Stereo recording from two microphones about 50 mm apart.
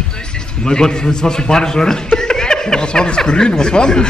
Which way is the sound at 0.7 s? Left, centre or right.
Centre.